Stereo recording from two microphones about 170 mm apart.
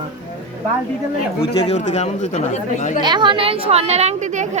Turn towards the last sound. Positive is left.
turn(degrees=-35)  # may be behind; listen again after turning